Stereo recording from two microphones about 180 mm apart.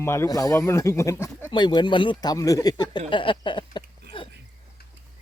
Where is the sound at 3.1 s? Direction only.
25° left (ahead or behind).